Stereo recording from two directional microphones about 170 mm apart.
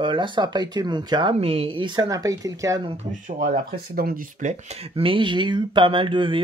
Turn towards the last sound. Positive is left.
turn(degrees=-30)  # may be behind; listen again after turning